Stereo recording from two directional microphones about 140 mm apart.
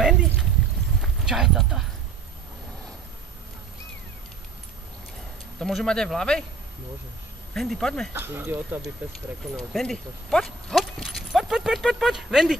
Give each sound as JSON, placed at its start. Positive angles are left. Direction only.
{"t": 0.0, "sound": "a sound", "side_deg": -5}
{"t": 1.0, "sound": "speech", "side_deg": 0}
{"t": 5.6, "sound": "speech", "side_deg": 0}
{"t": 7.5, "sound": "speech", "side_deg": 0}
{"t": 8.1, "sound": "speech", "side_deg": -15}
{"t": 9.7, "sound": "speech", "side_deg": 0}